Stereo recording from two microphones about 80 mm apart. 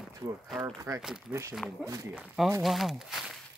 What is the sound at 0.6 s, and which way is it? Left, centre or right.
Speech, right.